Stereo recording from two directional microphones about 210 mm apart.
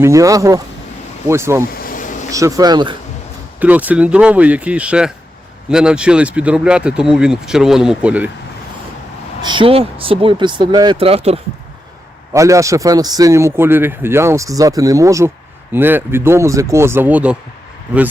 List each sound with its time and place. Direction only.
0.0 s a man's voice: 15° right (ahead or behind)
1.8 s bee: 40° left (ahead or behind)
2.3 s a man's voice: 15° right (ahead or behind)
3.6 s a man's voice: 5° right (ahead or behind)
9.4 s speech: 20° right (ahead or behind)
12.3 s a man's voice: 15° right (ahead or behind)